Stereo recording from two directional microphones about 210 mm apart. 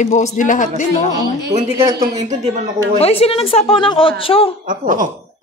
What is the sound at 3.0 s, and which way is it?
A woman's voice, 30° left (ahead or behind).